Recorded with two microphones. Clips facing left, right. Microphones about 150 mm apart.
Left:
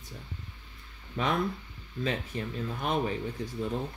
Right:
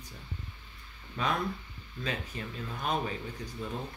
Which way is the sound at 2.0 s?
25° left (ahead or behind).